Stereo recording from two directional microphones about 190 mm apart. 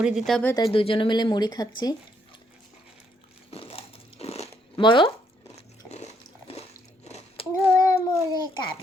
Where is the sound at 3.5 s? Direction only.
30° left (ahead or behind).